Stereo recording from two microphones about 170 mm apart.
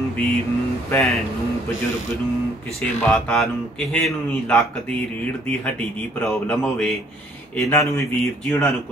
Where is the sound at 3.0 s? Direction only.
5° left (ahead or behind).